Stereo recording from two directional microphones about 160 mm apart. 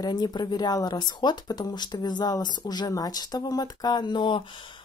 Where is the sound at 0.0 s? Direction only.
25° left (ahead or behind).